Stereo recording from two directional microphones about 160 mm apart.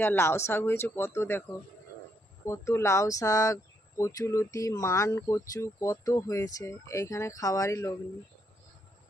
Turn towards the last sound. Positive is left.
turn(degrees=20)  # may be behind; listen again after turning